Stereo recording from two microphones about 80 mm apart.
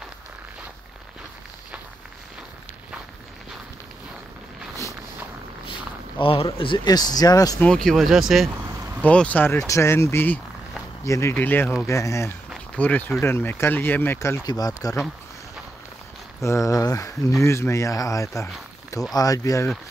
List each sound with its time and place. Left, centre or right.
5.7 s a sound: left
6.9 s speech: left
7.5 s speech: centre
9.0 s speech: centre
9.7 s speech: left
11.1 s speech: left
11.3 s speech: left
11.8 s speech: left
12.7 s speech: left
14.4 s speech: left
16.4 s speech: left
17.4 s speech: left